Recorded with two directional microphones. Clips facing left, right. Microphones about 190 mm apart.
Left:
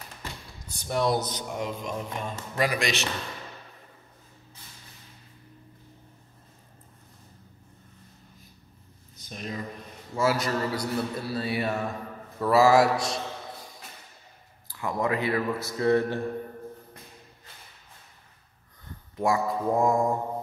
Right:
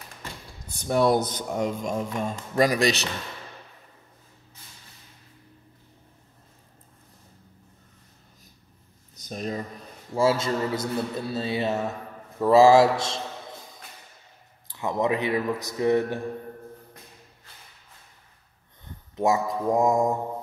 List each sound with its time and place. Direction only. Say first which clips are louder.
0.7 s speech: right 5 dB; 55° right (ahead or behind)
9.1 s a sound: right 5 dB; 40° right (ahead or behind)
10.1 s speech: right 3 dB; 25° right (ahead or behind)
14.7 s speech: right 3 dB; 20° right (ahead or behind)
19.1 s speech: right 2 dB; 20° right (ahead or behind)